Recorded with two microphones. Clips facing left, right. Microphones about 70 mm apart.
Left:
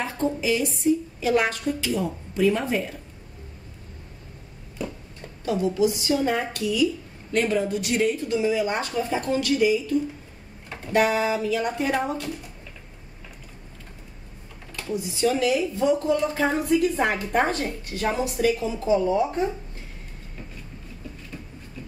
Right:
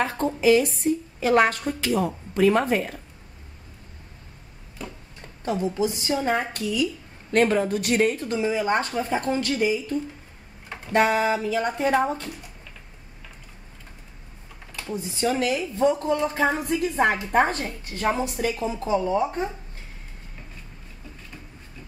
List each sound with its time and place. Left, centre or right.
0.0 s a woman's voice: right
5.4 s speech: right
7.3 s speech: right
14.9 s a woman's voice: right